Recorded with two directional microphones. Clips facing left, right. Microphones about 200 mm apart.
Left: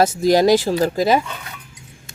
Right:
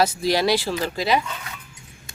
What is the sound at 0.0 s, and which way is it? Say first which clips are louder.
Speech: left 6 dB; 45° left (ahead or behind).